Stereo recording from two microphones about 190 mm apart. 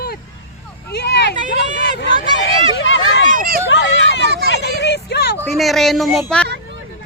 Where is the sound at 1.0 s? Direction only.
65° left (ahead or behind).